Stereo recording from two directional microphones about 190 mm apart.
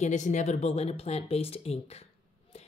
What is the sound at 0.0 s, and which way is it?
Speech, 40° left (ahead or behind).